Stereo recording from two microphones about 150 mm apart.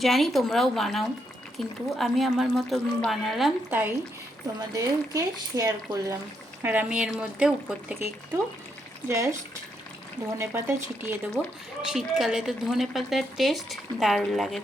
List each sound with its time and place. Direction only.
0.0 s a woman's voice: centre (ahead or behind)
3.7 s speech: 15° right (ahead or behind)
6.6 s speech: 10° right (ahead or behind)
9.0 s speech: 20° right (ahead or behind)
10.3 s a woman's voice: 15° right (ahead or behind)